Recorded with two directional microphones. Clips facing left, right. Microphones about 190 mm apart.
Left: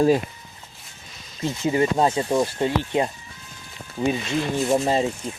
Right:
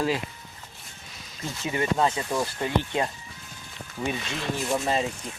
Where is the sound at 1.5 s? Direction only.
25° left (ahead or behind).